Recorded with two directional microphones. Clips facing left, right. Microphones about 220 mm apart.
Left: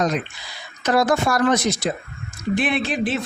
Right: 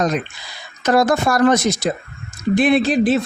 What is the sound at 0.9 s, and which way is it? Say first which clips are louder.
Speech: right 3 dB; 45° right (ahead or behind).